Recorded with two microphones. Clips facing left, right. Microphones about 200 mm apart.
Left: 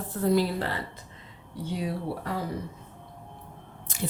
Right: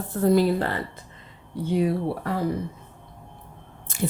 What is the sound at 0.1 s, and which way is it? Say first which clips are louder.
Speech: right 5 dB; 45° right (ahead or behind).